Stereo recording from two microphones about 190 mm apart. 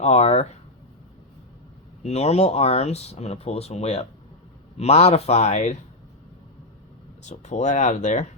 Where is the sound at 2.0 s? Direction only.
35° left (ahead or behind).